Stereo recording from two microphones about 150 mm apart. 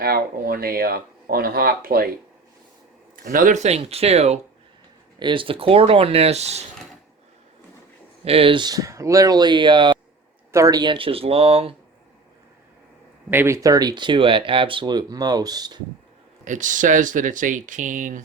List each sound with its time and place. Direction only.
0.0 s speech: 85° right
3.2 s speech: 65° right (ahead or behind); by 4.4 s 45° right (ahead or behind)
5.2 s speech: 35° right (ahead or behind)
8.2 s speech: 40° right (ahead or behind)
13.3 s speech: 15° right (ahead or behind)
16.4 s speech: 55° right (ahead or behind)